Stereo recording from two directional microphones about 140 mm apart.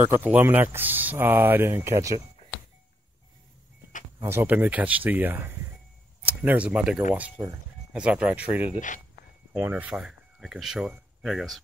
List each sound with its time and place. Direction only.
0.0 s speech: 15° right (ahead or behind)
4.2 s speech: 15° right (ahead or behind)
8.7 s speech: 65° left (ahead or behind)
9.5 s speech: 15° right (ahead or behind)